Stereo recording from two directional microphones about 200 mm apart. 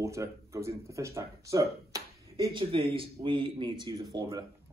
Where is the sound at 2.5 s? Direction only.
25° right (ahead or behind).